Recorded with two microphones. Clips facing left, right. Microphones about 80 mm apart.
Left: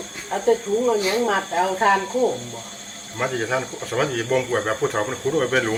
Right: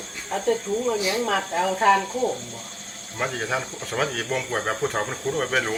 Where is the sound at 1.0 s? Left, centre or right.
Left.